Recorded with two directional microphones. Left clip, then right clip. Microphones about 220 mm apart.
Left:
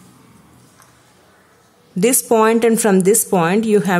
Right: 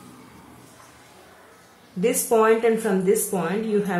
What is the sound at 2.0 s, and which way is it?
Speech, 50° left (ahead or behind).